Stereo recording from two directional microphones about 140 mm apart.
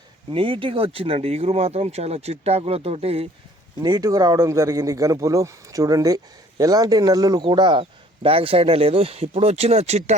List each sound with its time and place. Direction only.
0.3 s speech: 40° right (ahead or behind)
3.8 s speech: 30° right (ahead or behind); by 10.2 s 50° right (ahead or behind)